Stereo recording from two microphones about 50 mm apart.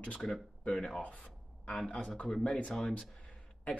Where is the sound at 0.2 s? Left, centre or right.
Centre.